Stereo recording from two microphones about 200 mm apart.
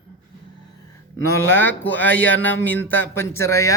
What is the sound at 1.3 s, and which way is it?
Speech, 10° left (ahead or behind).